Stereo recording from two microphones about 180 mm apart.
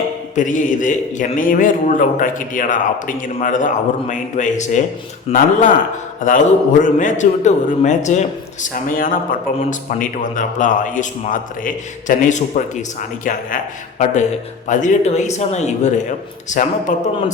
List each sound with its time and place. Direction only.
0.3 s a man's voice: 45° left (ahead or behind)